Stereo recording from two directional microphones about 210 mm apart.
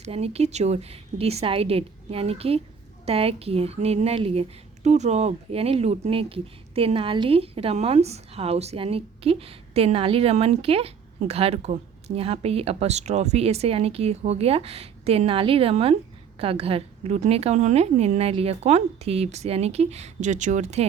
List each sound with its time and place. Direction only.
0.0 s a woman's voice: 30° right (ahead or behind)